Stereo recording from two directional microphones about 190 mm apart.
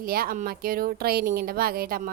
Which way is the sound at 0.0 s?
50° right (ahead or behind).